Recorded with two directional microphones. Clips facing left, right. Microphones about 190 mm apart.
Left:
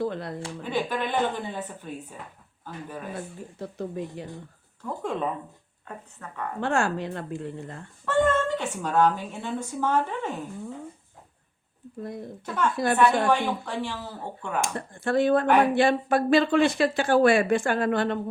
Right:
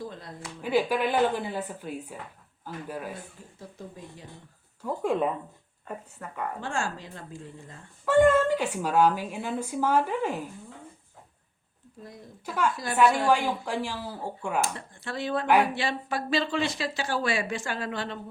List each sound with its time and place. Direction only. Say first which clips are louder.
0.0 s speech: left 9 dB; 65° left (ahead or behind)
0.6 s a woman's voice: right 4 dB; 10° right (ahead or behind)
3.6 s speech: left 10 dB; 70° left (ahead or behind)
4.8 s a woman's voice: right 2 dB; 10° right (ahead or behind)
6.1 s a woman's voice: right 1 dB; 10° right (ahead or behind)
6.6 s speech: left 11 dB; 65° left (ahead or behind)
8.0 s a woman's voice: right 3 dB; 10° right (ahead or behind)
12.5 s a woman's voice: left 1 dB; 10° right (ahead or behind)
12.7 s speech: left 9 dB; 60° left (ahead or behind)
13.2 s a woman's voice: even; 10° right (ahead or behind)
14.8 s speech: left 11 dB; 50° left (ahead or behind)